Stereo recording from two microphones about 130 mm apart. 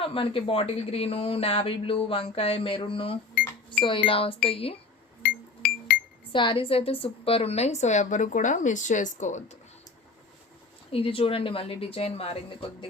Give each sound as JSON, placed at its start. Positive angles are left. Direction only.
{"t": 0.0, "sound": "speech", "side_deg": 45}
{"t": 6.3, "sound": "a woman's voice", "side_deg": 40}
{"t": 10.9, "sound": "speech", "side_deg": 45}